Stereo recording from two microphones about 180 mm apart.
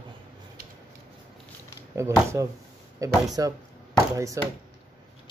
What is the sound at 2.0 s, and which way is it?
Speech, 15° right (ahead or behind).